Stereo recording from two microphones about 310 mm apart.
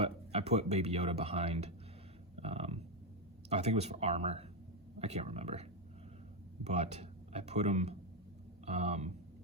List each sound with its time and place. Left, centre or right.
0.0 s speech: centre
2.3 s a sound: centre
3.5 s speech: right
6.7 s speech: right